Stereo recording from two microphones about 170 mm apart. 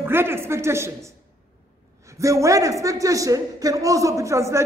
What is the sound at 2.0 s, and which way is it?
A man's voice, 20° right (ahead or behind).